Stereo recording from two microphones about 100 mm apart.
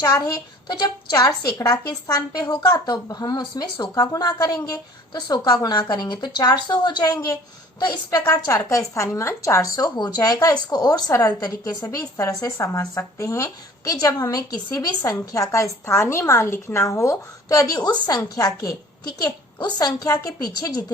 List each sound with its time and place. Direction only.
0.0 s a woman's voice: 40° left (ahead or behind)
17.7 s a woman's voice: 45° left (ahead or behind)